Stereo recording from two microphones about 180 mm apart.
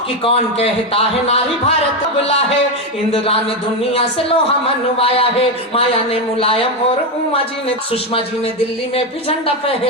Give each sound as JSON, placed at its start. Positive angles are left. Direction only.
{"t": 0.3, "sound": "a man's voice", "side_deg": 35}
{"t": 3.9, "sound": "a man's voice", "side_deg": 30}
{"t": 6.4, "sound": "a man's voice", "side_deg": 30}